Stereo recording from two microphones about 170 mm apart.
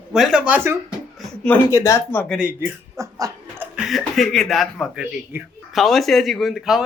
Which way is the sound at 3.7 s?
Centre (ahead or behind).